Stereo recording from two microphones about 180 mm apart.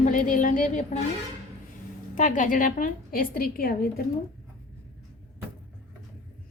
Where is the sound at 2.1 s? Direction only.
45° left (ahead or behind).